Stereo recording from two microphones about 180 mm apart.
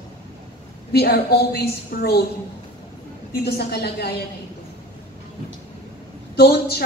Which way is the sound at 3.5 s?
65° left (ahead or behind).